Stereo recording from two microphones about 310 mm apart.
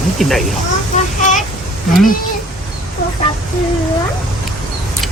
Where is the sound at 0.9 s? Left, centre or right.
Left.